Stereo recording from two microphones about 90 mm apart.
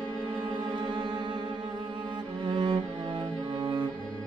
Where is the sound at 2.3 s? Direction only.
55° right (ahead or behind).